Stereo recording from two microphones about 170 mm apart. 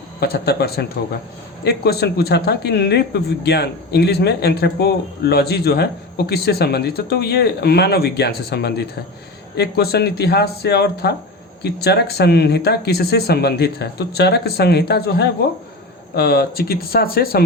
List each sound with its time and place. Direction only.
0.2 s a man's voice: 70° left (ahead or behind)